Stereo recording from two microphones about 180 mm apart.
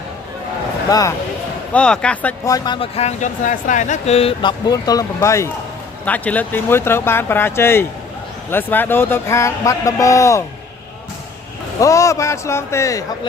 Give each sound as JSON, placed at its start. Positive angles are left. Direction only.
{"t": 0.9, "sound": "speech", "side_deg": 20}
{"t": 1.7, "sound": "speech", "side_deg": 5}
{"t": 2.5, "sound": "speech", "side_deg": 25}
{"t": 11.8, "sound": "speech", "side_deg": 15}